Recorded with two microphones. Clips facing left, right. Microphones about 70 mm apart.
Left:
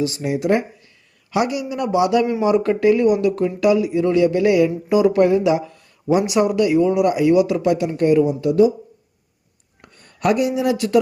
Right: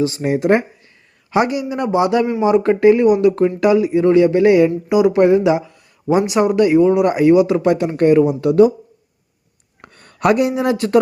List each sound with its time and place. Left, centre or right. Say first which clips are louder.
0.0 s speech: right 4 dB; right
4.9 s speech: right 1 dB; centre; by 8.7 s right
9.8 s speech: right 4 dB; right